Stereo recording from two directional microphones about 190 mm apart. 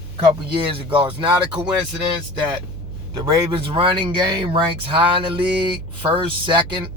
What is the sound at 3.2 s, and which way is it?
Speech, 25° right (ahead or behind).